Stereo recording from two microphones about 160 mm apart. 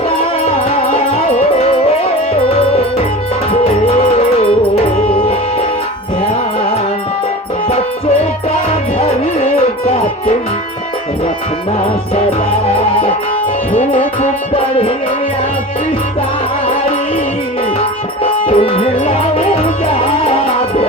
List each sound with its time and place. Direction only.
0.7 s music: 35° left (ahead or behind)
2.5 s music: 35° left (ahead or behind)
13.7 s music: 45° left (ahead or behind)
18.4 s music: 35° left (ahead or behind)